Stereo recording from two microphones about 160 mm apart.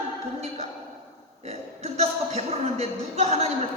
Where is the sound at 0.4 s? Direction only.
40° right (ahead or behind).